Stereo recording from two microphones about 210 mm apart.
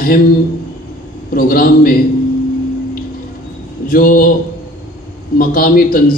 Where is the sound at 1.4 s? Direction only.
45° left (ahead or behind).